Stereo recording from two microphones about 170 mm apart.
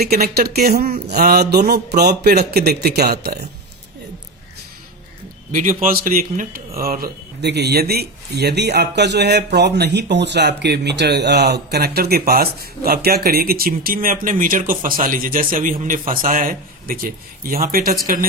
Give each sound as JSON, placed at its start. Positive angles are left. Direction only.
{"t": 0.0, "sound": "a man's voice", "side_deg": -65}
{"t": 5.5, "sound": "a man's voice", "side_deg": -50}